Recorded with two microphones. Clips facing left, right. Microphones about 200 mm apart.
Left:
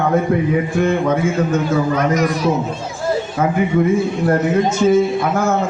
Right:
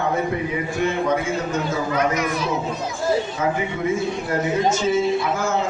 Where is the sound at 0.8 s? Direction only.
50° left (ahead or behind).